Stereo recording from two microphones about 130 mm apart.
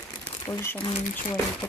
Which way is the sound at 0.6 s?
15° left (ahead or behind).